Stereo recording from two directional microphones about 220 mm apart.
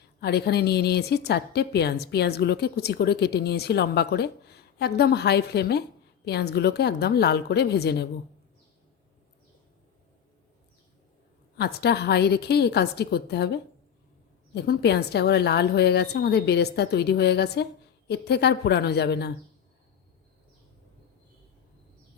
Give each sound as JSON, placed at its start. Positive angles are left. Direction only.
{"t": 0.2, "sound": "a woman's voice", "side_deg": 50}
{"t": 11.5, "sound": "a woman's voice", "side_deg": 50}
{"t": 14.5, "sound": "a woman's voice", "side_deg": 50}